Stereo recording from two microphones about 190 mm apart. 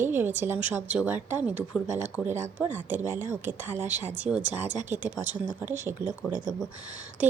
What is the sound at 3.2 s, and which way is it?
Speech, 40° right (ahead or behind).